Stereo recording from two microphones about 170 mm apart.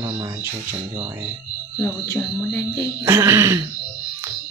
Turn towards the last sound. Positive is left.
turn(degrees=-15)  # may be behind; listen again after turning